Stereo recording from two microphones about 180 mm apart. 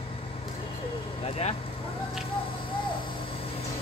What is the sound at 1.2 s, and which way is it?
Speech, 35° left (ahead or behind).